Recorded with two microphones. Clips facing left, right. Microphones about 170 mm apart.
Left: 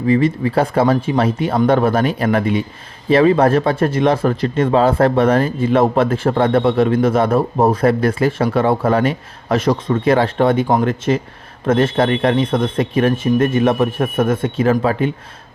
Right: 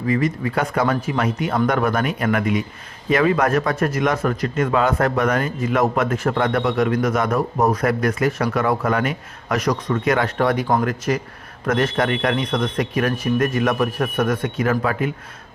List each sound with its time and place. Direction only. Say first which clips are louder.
0.1 s speech: left 6 dB; 30° left (ahead or behind)